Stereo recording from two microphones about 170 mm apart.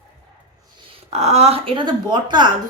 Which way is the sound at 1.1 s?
40° right (ahead or behind).